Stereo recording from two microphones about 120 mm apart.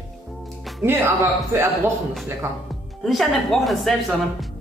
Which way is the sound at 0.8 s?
20° right (ahead or behind).